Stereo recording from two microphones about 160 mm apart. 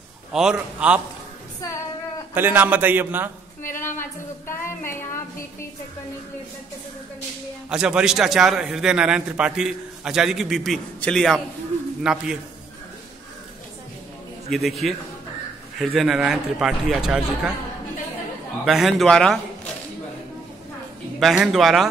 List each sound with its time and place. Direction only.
0.3 s a man's voice: 5° right (ahead or behind)
1.6 s female singing: 20° left (ahead or behind)
2.3 s a man's voice: 10° right (ahead or behind)
3.7 s speech: 15° left (ahead or behind)
7.7 s a man's voice: 5° right (ahead or behind)
14.5 s a man's voice: centre (ahead or behind)
18.7 s a man's voice: centre (ahead or behind)
21.2 s a man's voice: centre (ahead or behind)